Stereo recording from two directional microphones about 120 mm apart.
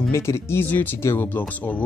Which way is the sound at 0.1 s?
25° left (ahead or behind).